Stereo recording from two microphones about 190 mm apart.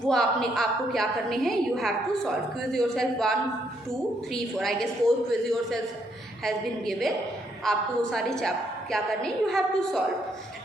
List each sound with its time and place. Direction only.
0.1 s a woman's voice: centre (ahead or behind)